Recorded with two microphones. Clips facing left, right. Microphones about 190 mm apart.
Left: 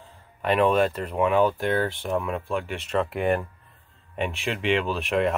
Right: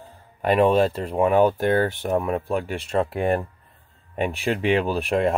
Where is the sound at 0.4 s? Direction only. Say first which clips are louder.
Right 3 dB; 35° right (ahead or behind).